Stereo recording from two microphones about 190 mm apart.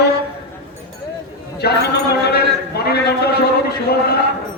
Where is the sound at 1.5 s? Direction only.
60° left (ahead or behind).